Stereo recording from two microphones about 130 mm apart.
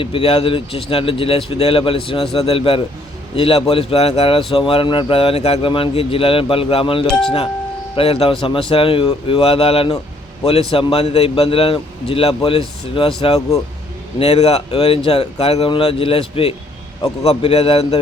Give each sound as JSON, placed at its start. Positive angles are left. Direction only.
{"t": 0.0, "sound": "a man's voice", "side_deg": 45}